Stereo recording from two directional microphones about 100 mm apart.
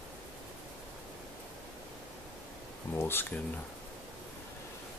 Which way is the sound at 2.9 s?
25° left (ahead or behind).